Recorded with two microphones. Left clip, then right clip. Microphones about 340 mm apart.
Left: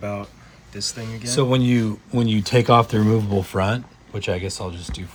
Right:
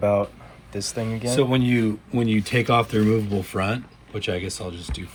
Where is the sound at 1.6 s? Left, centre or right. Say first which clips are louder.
Even; left.